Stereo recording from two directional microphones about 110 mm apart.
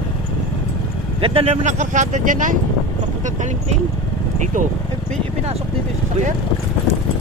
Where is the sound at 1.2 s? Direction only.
70° right (ahead or behind); by 2.2 s 85° right.